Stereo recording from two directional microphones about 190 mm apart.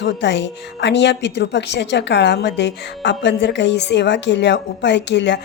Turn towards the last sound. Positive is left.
turn(degrees=65)  # may be behind; listen again after turning